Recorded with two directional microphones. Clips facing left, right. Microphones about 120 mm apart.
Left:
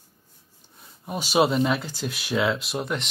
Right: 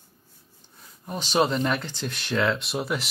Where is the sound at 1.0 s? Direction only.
10° left (ahead or behind).